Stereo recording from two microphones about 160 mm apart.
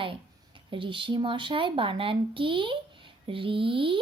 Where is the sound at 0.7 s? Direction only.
30° right (ahead or behind).